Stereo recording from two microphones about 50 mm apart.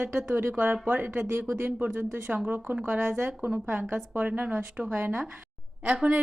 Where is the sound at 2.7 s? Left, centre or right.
Right.